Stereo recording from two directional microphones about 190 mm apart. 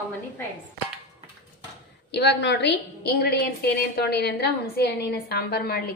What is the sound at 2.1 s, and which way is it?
A woman's voice, 65° left (ahead or behind).